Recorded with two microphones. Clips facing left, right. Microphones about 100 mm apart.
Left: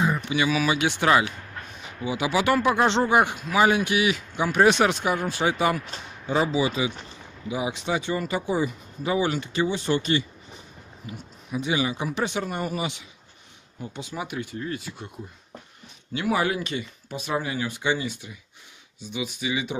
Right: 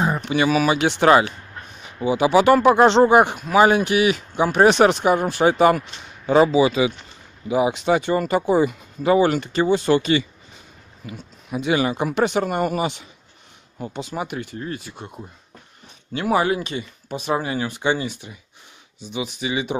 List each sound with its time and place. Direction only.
0.0 s speech: 40° right (ahead or behind)
5.0 s speech: 45° right (ahead or behind)
6.2 s speech: 75° right (ahead or behind)
7.4 s speech: 55° right (ahead or behind)
9.8 s speech: 90° right
11.1 s speech: 70° right (ahead or behind)
12.1 s speech: 90° right
12.4 s speech: 65° right (ahead or behind)
14.6 s speech: 40° right (ahead or behind)
16.1 s speech: 40° right (ahead or behind)
19.4 s speech: 45° right (ahead or behind)